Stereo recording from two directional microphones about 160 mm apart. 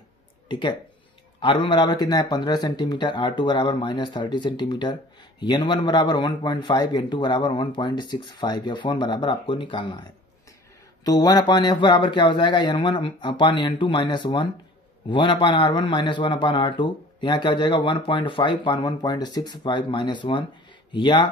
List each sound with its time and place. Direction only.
0.5 s a man's voice: 30° left (ahead or behind)
11.1 s a man's voice: 25° left (ahead or behind)